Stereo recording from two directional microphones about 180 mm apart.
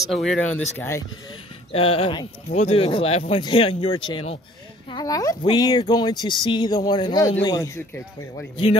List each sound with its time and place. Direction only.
0.0 s speech: centre (ahead or behind)
0.7 s speech: 15° left (ahead or behind)
1.7 s speech: 30° left (ahead or behind)